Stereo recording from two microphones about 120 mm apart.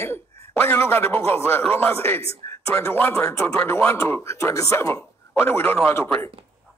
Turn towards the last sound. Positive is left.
turn(degrees=20)  # may be behind; listen again after turning